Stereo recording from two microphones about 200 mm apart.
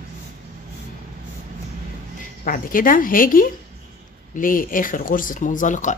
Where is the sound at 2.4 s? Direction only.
45° left (ahead or behind).